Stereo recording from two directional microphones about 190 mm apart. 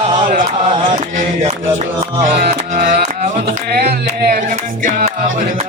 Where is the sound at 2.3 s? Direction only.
50° right (ahead or behind).